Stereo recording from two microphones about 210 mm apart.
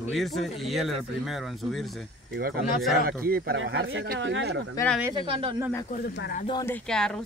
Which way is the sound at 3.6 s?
60° right (ahead or behind).